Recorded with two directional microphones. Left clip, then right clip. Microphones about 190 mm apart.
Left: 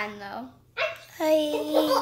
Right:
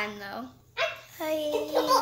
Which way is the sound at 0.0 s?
10° left (ahead or behind).